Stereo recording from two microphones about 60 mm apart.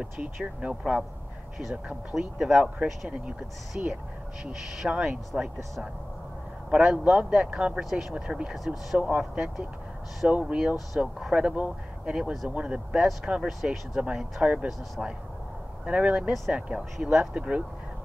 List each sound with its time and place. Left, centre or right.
0.4 s speech: centre
2.1 s speech: centre
6.7 s speech: centre